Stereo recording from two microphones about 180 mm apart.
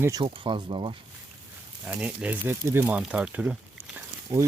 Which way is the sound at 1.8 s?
5° right (ahead or behind).